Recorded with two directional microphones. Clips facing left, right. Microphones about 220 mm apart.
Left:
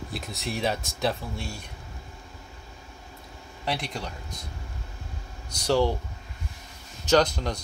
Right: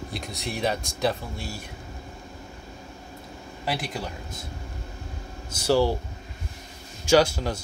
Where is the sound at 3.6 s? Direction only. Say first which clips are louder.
Right 1 dB; 5° right (ahead or behind).